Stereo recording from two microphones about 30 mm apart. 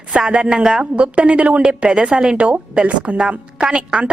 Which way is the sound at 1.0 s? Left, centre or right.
Right.